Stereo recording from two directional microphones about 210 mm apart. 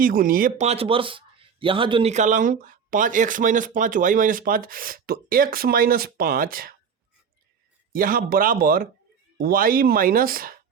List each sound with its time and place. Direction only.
0.0 s a man's voice: 45° right (ahead or behind)
7.9 s speech: 40° right (ahead or behind)